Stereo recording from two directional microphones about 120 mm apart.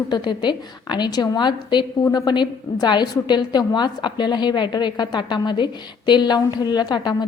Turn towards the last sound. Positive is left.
turn(degrees=35)  # may be behind; listen again after turning